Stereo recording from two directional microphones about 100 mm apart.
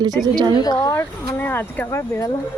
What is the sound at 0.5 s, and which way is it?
Speech, 45° left (ahead or behind).